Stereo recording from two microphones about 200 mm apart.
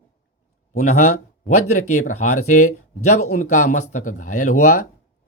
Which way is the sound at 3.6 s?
35° left (ahead or behind).